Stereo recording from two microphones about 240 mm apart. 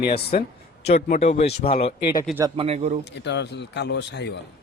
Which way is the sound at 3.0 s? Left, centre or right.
Left.